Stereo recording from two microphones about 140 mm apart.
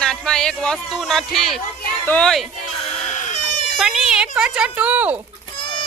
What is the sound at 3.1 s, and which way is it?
Goat, 60° left (ahead or behind).